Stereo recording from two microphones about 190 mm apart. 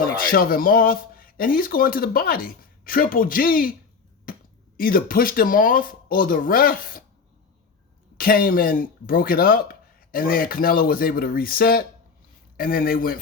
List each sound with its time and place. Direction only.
0.0 s speech: 50° left (ahead or behind)
4.3 s finger snapping: 50° left (ahead or behind)
4.8 s speech: 50° left (ahead or behind)
8.2 s speech: 50° left (ahead or behind)